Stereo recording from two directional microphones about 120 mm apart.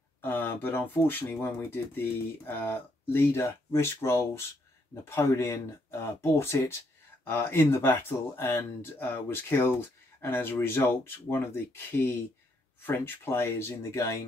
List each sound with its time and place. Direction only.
0.2 s speech: 20° left (ahead or behind)